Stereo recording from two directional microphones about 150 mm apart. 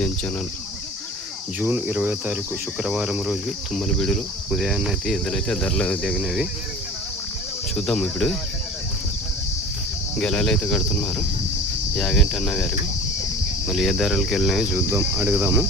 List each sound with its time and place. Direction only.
1.6 s speech: 10° right (ahead or behind)
2.8 s cricket: 5° right (ahead or behind)
7.8 s cricket: centre (ahead or behind)
10.2 s cricket: 5° left (ahead or behind)
14.8 s speech: 15° right (ahead or behind)